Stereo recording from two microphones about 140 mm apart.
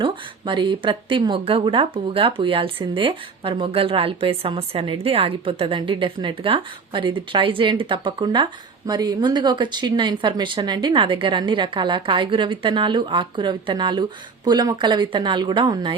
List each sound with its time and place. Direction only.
0.0 s speech: 35° right (ahead or behind)